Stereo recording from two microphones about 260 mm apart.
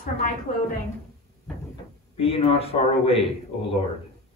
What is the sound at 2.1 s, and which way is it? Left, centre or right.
Speech, left.